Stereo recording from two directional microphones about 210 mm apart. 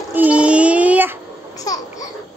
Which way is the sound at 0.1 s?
5° right (ahead or behind).